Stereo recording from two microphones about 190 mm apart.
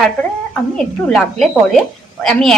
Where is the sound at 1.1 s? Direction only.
Centre (ahead or behind).